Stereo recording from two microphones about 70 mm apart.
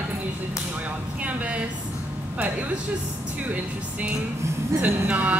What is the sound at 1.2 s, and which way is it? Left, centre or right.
Speech, right.